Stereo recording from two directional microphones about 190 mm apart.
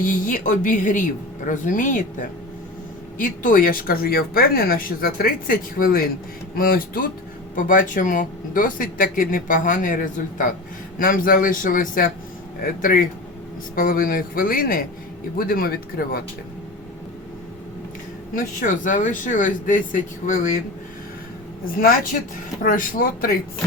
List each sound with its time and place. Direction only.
0.0 s speech: 45° left (ahead or behind)
18.3 s speech: 45° left (ahead or behind)
21.8 s speech: 50° left (ahead or behind)